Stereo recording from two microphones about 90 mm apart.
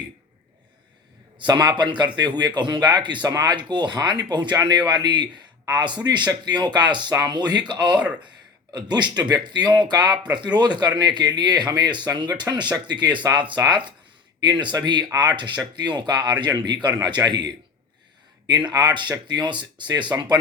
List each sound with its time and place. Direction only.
1.4 s speech: 50° right (ahead or behind)
7.9 s speech: 15° right (ahead or behind)
8.7 s speech: 55° right (ahead or behind)
20.1 s speech: 35° right (ahead or behind)